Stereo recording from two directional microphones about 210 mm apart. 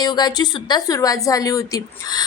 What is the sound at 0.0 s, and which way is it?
A woman's voice, 20° left (ahead or behind).